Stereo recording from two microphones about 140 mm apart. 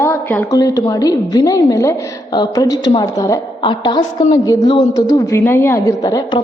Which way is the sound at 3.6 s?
35° left (ahead or behind).